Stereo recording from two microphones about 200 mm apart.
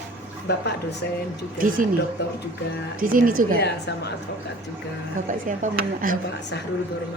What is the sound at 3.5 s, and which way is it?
Speech, 55° left (ahead or behind).